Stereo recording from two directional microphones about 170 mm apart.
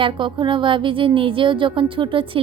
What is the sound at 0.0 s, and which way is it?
A woman's voice, 30° right (ahead or behind).